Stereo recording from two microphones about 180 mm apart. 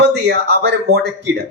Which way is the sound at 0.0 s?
65° right (ahead or behind).